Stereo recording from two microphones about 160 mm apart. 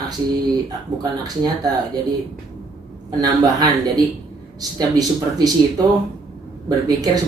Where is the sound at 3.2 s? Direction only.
25° right (ahead or behind).